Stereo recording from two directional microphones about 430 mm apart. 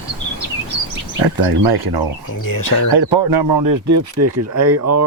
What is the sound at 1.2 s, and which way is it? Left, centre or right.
Speech, right.